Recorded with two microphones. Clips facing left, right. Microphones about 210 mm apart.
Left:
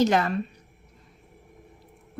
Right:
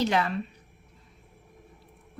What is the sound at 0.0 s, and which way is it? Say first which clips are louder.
Speech: left 4 dB; 45° left (ahead or behind).